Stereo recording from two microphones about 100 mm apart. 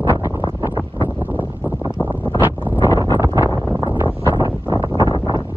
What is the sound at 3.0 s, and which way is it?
Wind noise, 35° right (ahead or behind).